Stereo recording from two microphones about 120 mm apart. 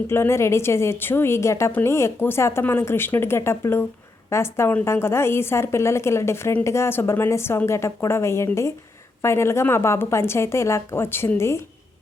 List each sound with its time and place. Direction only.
0.1 s a woman's voice: 20° left (ahead or behind)